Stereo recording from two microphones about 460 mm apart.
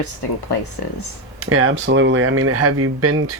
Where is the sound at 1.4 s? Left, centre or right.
Right.